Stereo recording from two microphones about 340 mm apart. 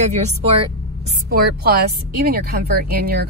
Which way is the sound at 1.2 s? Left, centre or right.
Right.